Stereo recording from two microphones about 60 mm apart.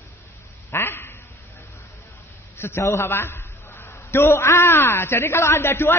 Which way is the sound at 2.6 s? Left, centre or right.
Left.